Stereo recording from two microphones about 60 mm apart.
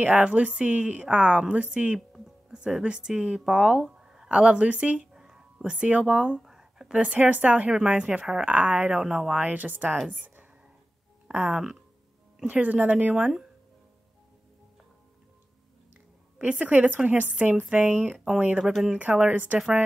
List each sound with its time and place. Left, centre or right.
0.0 s a woman's voice: right
2.0 s music: centre
2.5 s speech: centre
5.7 s speech: right
7.0 s a woman's voice: right
9.0 s speech: centre
9.3 s a woman's voice: right
10.1 s a sound: right
11.5 s speech: centre
12.4 s a woman's voice: right
15.9 s a sound: right
16.8 s a woman's voice: right
18.6 s speech: centre
18.9 s a woman's voice: right